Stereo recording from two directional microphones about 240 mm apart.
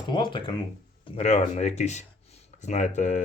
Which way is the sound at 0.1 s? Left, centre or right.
Centre.